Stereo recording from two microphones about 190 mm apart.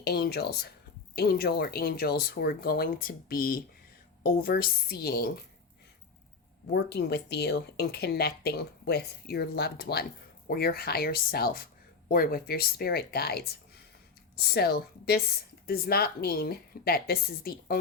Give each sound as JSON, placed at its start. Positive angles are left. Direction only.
{"t": 0.0, "sound": "speech", "side_deg": 55}
{"t": 6.7, "sound": "speech", "side_deg": 60}